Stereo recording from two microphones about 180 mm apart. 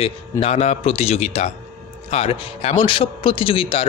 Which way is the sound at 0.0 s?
35° left (ahead or behind).